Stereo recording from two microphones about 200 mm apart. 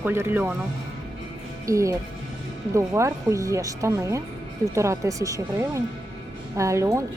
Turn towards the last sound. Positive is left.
turn(degrees=-15)  # may be behind; listen again after turning